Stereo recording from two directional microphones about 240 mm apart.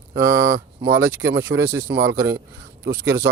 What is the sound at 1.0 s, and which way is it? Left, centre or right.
Speech, right.